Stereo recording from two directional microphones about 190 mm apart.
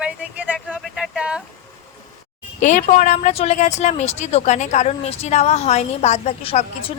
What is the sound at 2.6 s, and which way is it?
Speech, 45° left (ahead or behind).